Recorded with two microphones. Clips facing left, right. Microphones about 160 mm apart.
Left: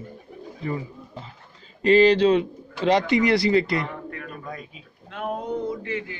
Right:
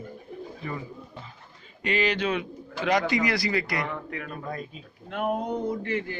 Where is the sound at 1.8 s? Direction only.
35° left (ahead or behind).